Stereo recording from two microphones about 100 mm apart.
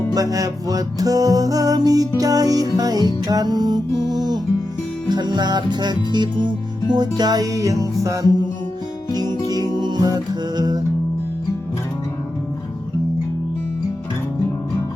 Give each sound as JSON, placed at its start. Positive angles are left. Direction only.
{"t": 0.1, "sound": "music", "side_deg": -35}
{"t": 9.6, "sound": "music", "side_deg": -45}